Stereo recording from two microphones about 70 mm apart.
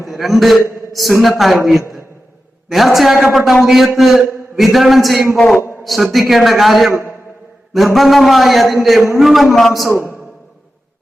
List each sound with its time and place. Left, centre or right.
0.1 s a man's voice: centre
7.9 s a man's voice: centre
9.9 s a man's voice: left